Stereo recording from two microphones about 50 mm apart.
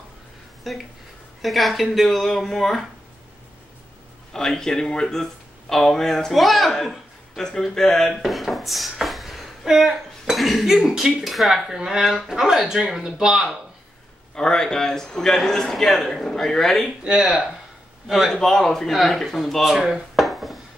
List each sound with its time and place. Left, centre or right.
0.7 s speech: centre
4.3 s speech: centre
14.3 s speech: centre
17.0 s speech: centre
18.0 s speech: centre
18.3 s speech: centre
19.7 s dishes: centre